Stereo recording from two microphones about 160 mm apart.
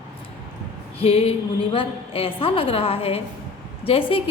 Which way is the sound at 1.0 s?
40° left (ahead or behind).